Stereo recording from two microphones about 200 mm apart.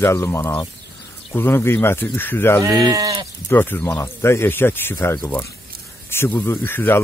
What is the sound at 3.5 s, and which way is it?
Speech, 10° left (ahead or behind).